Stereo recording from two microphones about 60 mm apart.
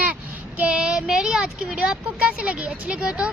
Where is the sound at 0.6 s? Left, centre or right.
Centre.